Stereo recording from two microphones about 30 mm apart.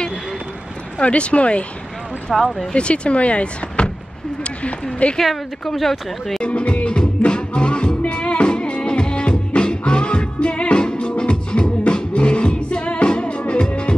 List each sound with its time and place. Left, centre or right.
0.9 s speech: left
2.3 s speech: centre
2.7 s speech: left
5.0 s speech: left
5.7 s speech: centre
6.4 s music: left